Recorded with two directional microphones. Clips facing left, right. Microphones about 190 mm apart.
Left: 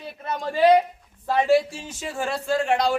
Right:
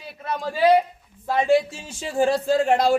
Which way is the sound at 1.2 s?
15° right (ahead or behind).